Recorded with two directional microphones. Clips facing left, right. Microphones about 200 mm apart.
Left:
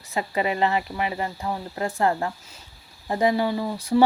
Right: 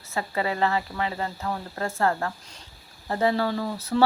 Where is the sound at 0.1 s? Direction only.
20° left (ahead or behind).